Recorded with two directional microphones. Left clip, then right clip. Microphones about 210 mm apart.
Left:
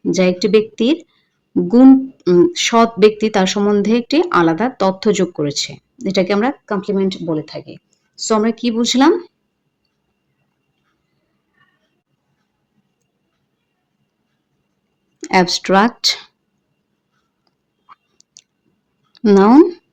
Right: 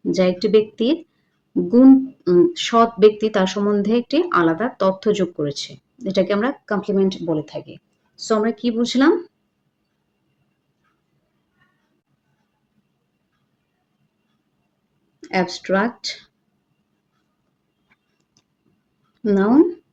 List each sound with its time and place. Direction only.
0.0 s speech: 30° left (ahead or behind)
15.2 s speech: 45° left (ahead or behind)
19.1 s speech: 45° left (ahead or behind)